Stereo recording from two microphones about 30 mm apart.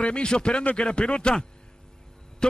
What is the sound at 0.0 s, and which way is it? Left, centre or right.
A man's voice, left.